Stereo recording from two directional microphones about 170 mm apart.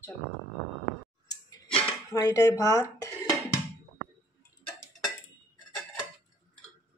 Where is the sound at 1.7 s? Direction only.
5° left (ahead or behind).